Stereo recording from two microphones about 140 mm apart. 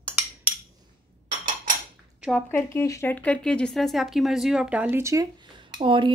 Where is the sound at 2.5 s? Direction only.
15° left (ahead or behind); by 5.2 s 20° right (ahead or behind).